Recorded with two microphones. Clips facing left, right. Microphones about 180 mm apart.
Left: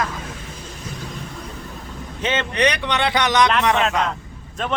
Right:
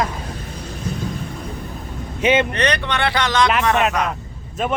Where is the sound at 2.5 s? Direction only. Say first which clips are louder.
Left 1 dB; 15° left (ahead or behind).